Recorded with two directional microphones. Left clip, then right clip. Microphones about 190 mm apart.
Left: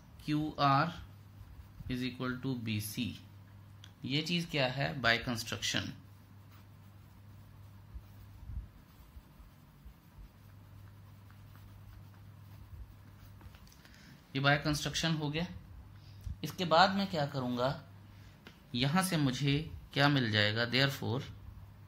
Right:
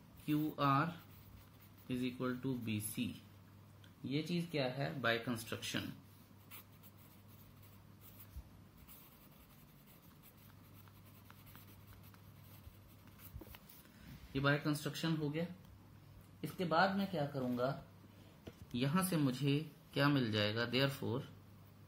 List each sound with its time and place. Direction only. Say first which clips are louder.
0.3 s speech: left 5 dB; 20° left (ahead or behind)
1.9 s speech: left 3 dB; 20° left (ahead or behind)
4.1 s speech: left 6 dB; 35° left (ahead or behind)
5.0 s speech: left 6 dB; 20° left (ahead or behind)
14.3 s speech: left 6 dB; 20° left (ahead or behind)
16.3 s speech: left 7 dB; 40° left (ahead or behind)
18.7 s speech: left 6 dB; 20° left (ahead or behind)